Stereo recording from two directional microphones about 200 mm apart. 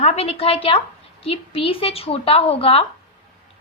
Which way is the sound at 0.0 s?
30° left (ahead or behind).